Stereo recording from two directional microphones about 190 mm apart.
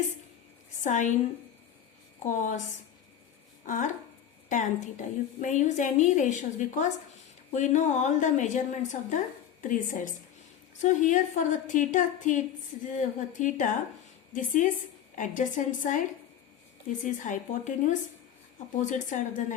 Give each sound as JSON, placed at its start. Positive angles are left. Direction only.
{"t": 0.9, "sound": "a woman's voice", "side_deg": 40}
{"t": 2.2, "sound": "a woman's voice", "side_deg": 40}
{"t": 3.7, "sound": "a woman's voice", "side_deg": 40}